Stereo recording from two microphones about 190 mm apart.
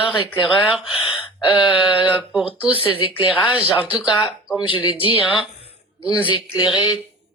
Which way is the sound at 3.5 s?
5° right (ahead or behind).